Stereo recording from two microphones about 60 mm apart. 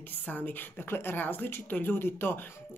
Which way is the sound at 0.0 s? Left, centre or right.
Left.